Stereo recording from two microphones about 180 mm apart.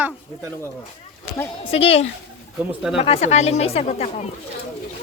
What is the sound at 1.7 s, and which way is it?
Speech, 30° left (ahead or behind).